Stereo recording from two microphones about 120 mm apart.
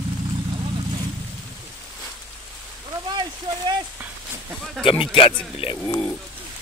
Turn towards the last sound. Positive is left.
turn(degrees=50)  # may be behind; listen again after turning